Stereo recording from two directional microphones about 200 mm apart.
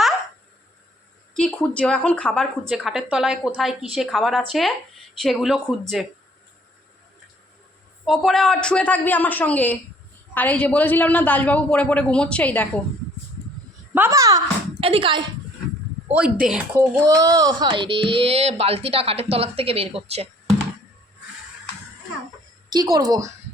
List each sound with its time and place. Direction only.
1.3 s speech: 5° left (ahead or behind)
8.0 s a man's voice: centre (ahead or behind)
13.9 s a child's voice: 15° right (ahead or behind)
14.8 s speech: 30° right (ahead or behind)
16.1 s speech: 5° right (ahead or behind)
17.2 s speech: 20° right (ahead or behind)
22.7 s speech: 20° right (ahead or behind)